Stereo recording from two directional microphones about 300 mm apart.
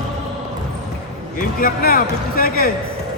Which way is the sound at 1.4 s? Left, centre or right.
Left.